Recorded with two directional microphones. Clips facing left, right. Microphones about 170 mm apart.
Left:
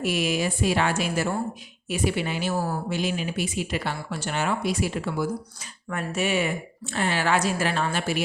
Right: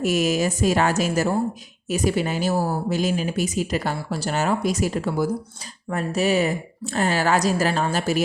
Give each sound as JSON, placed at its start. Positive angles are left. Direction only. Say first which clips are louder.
{"t": 0.0, "sound": "speech", "louder": "right 4 dB", "side_deg": -45}